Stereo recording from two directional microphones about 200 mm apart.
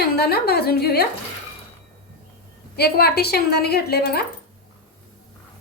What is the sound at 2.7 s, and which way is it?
A woman's voice, 50° left (ahead or behind).